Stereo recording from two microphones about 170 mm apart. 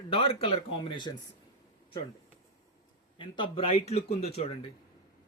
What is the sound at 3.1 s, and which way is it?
A man's voice, 30° left (ahead or behind).